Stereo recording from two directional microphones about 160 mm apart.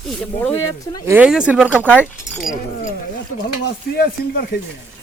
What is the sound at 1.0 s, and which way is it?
Speech, 10° right (ahead or behind).